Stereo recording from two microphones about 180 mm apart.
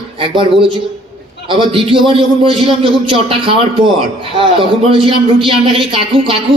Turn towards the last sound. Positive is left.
turn(degrees=-30)  # may be behind; listen again after turning